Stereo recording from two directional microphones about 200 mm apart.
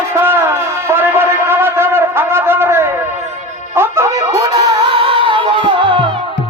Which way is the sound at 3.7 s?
10° right (ahead or behind).